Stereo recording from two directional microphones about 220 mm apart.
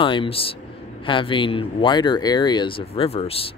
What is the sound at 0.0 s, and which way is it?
Speech, 25° left (ahead or behind).